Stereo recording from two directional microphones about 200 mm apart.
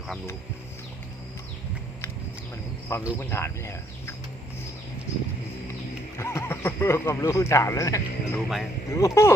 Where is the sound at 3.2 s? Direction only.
10° left (ahead or behind).